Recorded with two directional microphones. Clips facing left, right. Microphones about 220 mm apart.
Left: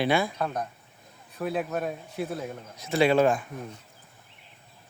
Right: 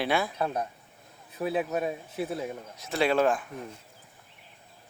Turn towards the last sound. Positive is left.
turn(degrees=0)  # may be behind; listen again after turning